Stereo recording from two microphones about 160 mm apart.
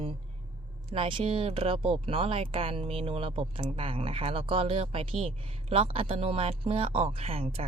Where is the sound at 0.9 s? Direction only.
35° right (ahead or behind).